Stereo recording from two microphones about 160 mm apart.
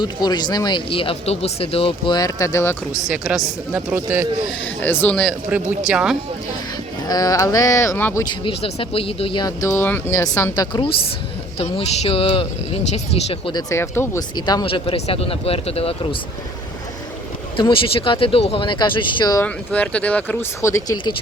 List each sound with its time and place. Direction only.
0.0 s speech: 25° left (ahead or behind)
3.1 s speech: 5° right (ahead or behind)
4.6 s speech: 10° left (ahead or behind)
5.5 s speech: 10° right (ahead or behind)
7.1 s speech: 20° left (ahead or behind)
8.3 s speech: 35° left (ahead or behind)
9.6 s speech: 20° left (ahead or behind)
11.5 s speech: 40° left (ahead or behind)
13.5 s speech: 20° left (ahead or behind)
14.3 s speech: 25° left (ahead or behind)
17.6 s speech: 35° left (ahead or behind)
19.4 s speech: 10° left (ahead or behind)